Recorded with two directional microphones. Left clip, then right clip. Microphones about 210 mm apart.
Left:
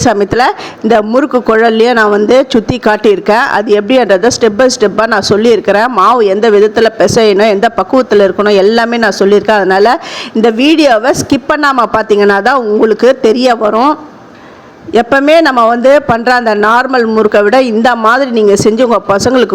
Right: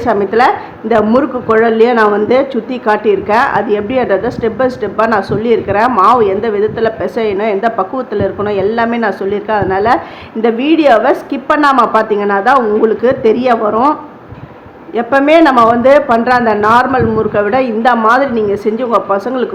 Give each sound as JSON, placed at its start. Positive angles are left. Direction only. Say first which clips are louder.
{"t": 0.0, "sound": "a woman's voice", "louder": "left 2 dB", "side_deg": 45}
{"t": 14.9, "sound": "a woman's voice", "louder": "left 2 dB", "side_deg": 45}